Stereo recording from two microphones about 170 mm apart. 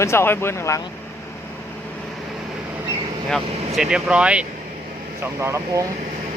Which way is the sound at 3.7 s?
5° right (ahead or behind).